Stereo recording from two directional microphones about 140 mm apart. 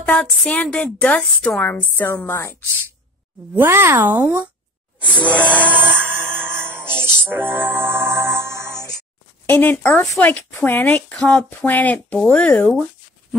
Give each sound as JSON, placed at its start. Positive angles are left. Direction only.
{"t": 0.0, "sound": "a woman's voice", "side_deg": 10}
{"t": 3.5, "sound": "speech", "side_deg": -15}
{"t": 5.4, "sound": "a woman's voice", "side_deg": 10}
{"t": 6.1, "sound": "music", "side_deg": 5}
{"t": 7.2, "sound": "music", "side_deg": -15}
{"t": 9.5, "sound": "a woman's voice", "side_deg": 15}